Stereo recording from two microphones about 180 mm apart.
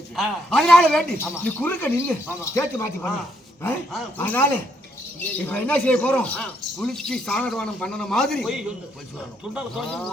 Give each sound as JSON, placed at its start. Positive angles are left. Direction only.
{"t": 0.2, "sound": "speech", "side_deg": 0}
{"t": 4.2, "sound": "speech", "side_deg": 10}